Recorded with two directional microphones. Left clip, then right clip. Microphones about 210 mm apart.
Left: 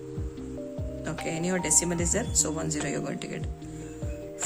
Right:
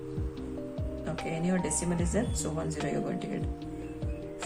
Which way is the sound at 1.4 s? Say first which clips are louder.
Left 7 dB; 45° left (ahead or behind).